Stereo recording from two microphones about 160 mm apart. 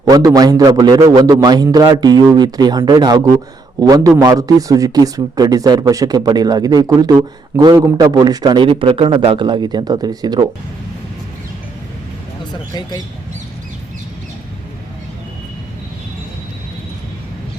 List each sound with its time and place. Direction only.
0.0 s speech: 25° right (ahead or behind)